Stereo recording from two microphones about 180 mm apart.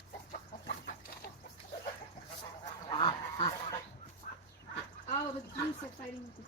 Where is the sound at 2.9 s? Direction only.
25° left (ahead or behind).